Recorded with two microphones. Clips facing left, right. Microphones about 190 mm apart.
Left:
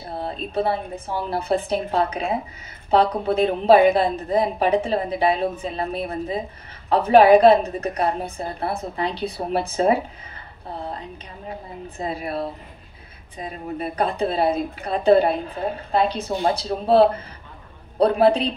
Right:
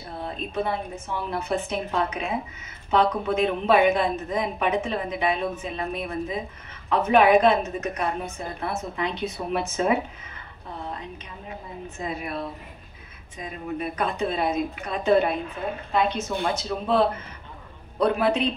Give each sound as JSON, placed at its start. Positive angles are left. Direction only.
{"t": 0.2, "sound": "a woman's voice", "side_deg": 35}
{"t": 10.7, "sound": "a sound", "side_deg": 35}
{"t": 12.0, "sound": "a woman's voice", "side_deg": 35}